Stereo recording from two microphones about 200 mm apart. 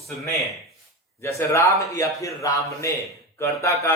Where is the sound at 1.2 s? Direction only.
15° left (ahead or behind).